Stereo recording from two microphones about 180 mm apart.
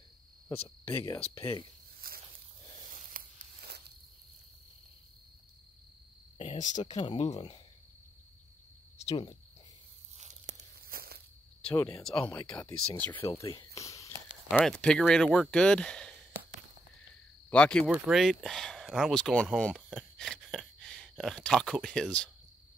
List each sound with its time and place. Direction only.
0.7 s speech: 10° left (ahead or behind)
2.0 s snake: 55° right (ahead or behind)
2.9 s a sound: 50° right (ahead or behind)
6.3 s speech: 35° left (ahead or behind)
8.9 s cricket: 30° left (ahead or behind)
10.1 s tearing: 40° right (ahead or behind)
11.7 s speech: 15° left (ahead or behind)
13.3 s a sound: 25° left (ahead or behind)
14.5 s speech: 5° left (ahead or behind)
17.5 s speech: 5° left (ahead or behind)
17.8 s speech: 5° right (ahead or behind)
19.6 s a sound: centre (ahead or behind)